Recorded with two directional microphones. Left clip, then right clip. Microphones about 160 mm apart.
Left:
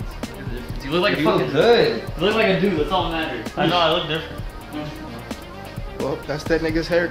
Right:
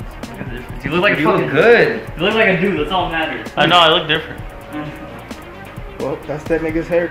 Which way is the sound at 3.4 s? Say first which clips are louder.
Right 8 dB; centre (ahead or behind).